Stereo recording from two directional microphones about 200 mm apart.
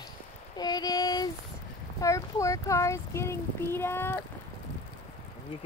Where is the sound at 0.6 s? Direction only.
20° left (ahead or behind).